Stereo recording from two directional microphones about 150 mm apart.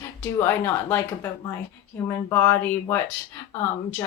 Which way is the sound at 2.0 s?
15° left (ahead or behind).